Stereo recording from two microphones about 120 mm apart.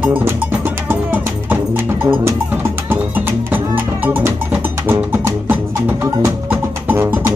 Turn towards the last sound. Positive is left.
turn(degrees=-20)  # may be behind; listen again after turning